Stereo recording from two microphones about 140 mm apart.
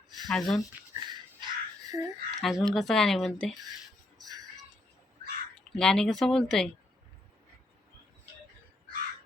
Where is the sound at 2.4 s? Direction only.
Centre (ahead or behind).